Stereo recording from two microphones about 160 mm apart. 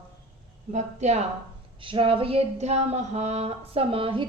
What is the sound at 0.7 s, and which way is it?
Speech, 45° right (ahead or behind).